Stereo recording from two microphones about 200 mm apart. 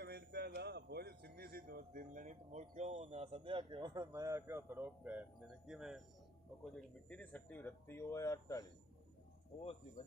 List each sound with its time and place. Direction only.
0.0 s a man's voice: 55° right (ahead or behind); by 8.6 s 15° left (ahead or behind)
9.6 s speech: 30° left (ahead or behind)